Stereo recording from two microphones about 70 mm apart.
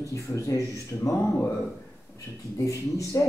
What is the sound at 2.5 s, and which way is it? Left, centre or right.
Speech, left.